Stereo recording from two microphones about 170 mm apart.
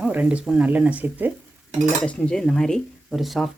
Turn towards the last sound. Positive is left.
turn(degrees=0)  # may be behind; listen again after turning